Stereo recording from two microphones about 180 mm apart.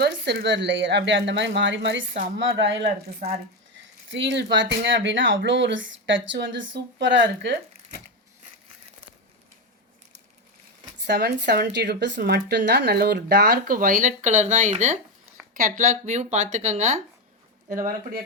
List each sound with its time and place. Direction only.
0.0 s speech: 65° right (ahead or behind); by 2.8 s 80° right
3.2 s speech: 40° right (ahead or behind)
4.1 s speech: 80° right
11.0 s speech: 65° right (ahead or behind)